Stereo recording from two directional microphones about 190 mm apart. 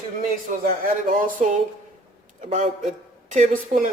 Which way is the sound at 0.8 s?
45° right (ahead or behind).